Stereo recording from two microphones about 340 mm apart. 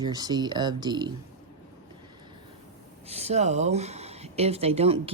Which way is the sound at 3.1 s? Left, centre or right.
Centre.